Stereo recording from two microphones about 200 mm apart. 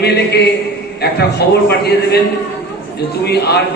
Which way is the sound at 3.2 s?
55° left (ahead or behind).